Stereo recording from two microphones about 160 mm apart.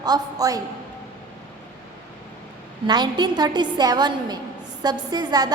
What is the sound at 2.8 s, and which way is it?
A woman's voice, 25° right (ahead or behind).